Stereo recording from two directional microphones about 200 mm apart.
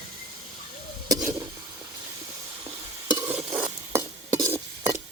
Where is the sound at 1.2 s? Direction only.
15° right (ahead or behind).